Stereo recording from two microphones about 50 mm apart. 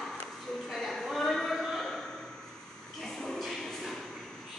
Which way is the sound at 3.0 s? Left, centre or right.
Centre.